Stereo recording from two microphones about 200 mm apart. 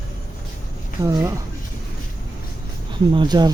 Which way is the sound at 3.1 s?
20° right (ahead or behind).